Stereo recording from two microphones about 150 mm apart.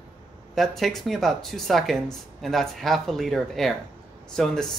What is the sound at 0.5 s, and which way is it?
Speech, centre (ahead or behind).